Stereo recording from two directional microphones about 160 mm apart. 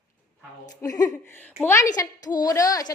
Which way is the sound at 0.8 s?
25° left (ahead or behind).